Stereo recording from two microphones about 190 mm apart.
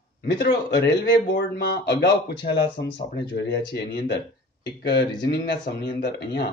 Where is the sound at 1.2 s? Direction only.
60° left (ahead or behind).